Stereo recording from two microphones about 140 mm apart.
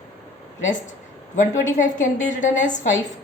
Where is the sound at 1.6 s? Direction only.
65° left (ahead or behind).